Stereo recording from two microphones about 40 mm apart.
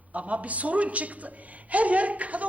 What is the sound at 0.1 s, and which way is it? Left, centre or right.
A woman's voice, right.